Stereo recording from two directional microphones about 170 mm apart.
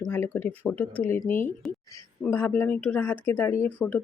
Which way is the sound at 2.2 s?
10° left (ahead or behind).